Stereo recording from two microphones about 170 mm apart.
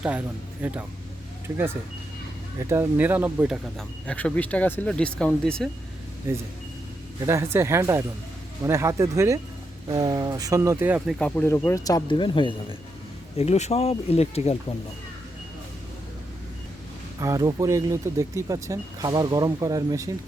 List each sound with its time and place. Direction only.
0.0 s speech: 10° right (ahead or behind)
2.6 s speech: 15° right (ahead or behind); by 5.6 s 5° left (ahead or behind)
6.3 s speech: 15° right (ahead or behind)
11.2 s speech: 10° left (ahead or behind); by 14.5 s 40° left (ahead or behind)
17.2 s speech: 20° right (ahead or behind)